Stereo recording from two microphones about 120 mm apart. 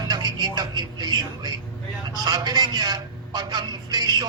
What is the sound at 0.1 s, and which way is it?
A man's voice, 35° right (ahead or behind).